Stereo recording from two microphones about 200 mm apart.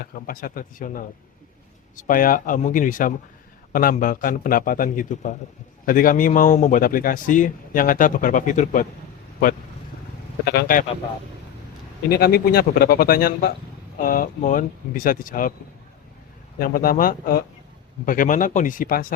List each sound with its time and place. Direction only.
0.0 s speech: 45° left (ahead or behind)
10.5 s speech: 50° left (ahead or behind)
12.1 s speech: 50° left (ahead or behind)
16.6 s speech: 45° left (ahead or behind)